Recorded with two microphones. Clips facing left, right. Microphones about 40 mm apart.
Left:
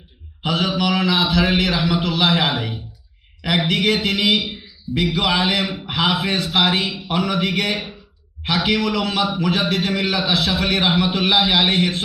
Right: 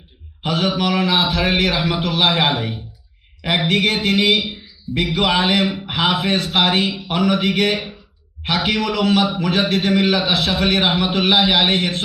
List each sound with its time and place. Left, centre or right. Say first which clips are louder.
0.5 s a man's voice: right 1 dB; right